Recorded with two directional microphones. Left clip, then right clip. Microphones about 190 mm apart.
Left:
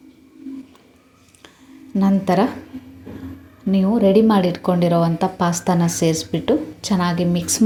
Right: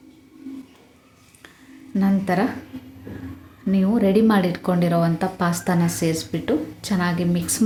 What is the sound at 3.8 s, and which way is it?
Speech, 5° left (ahead or behind).